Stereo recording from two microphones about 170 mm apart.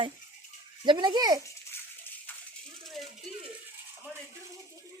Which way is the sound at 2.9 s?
Centre (ahead or behind).